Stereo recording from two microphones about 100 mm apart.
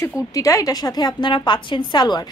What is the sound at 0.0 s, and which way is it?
A woman's voice, 30° left (ahead or behind).